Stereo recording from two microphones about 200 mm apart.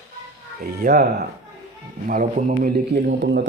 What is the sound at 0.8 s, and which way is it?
Speech, 50° right (ahead or behind).